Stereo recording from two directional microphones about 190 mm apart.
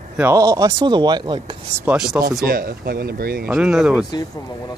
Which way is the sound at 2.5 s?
50° right (ahead or behind).